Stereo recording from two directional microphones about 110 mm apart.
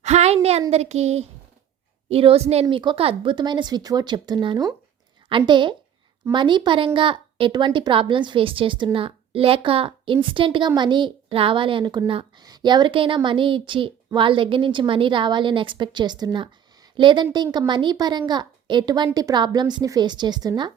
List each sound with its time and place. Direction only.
0.0 s a sound: 85° right
0.7 s speech: 75° right (ahead or behind)
2.0 s a woman's voice: 60° right (ahead or behind)
2.6 s a woman's voice: 50° right (ahead or behind)